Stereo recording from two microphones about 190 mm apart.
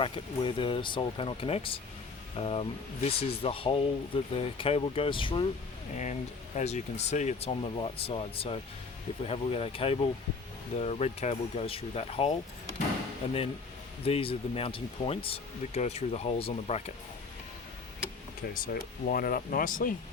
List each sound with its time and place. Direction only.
0.0 s speech: 25° left (ahead or behind)
6.6 s speech: 35° left (ahead or behind)
18.5 s speech: 45° left (ahead or behind)